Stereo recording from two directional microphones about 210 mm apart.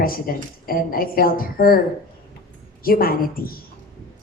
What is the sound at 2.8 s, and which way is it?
Speech, 45° left (ahead or behind).